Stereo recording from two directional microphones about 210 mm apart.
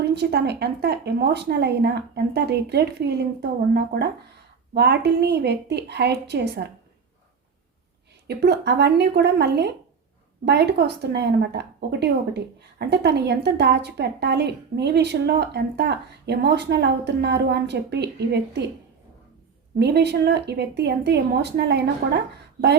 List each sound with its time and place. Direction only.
0.0 s speech: 50° right (ahead or behind)
8.3 s speech: 50° right (ahead or behind)
19.8 s speech: 50° right (ahead or behind)